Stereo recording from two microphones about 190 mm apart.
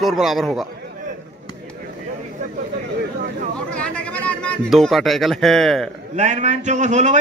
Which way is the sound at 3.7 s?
5° left (ahead or behind).